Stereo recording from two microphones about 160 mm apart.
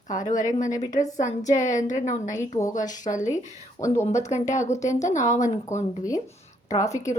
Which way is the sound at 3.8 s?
20° left (ahead or behind).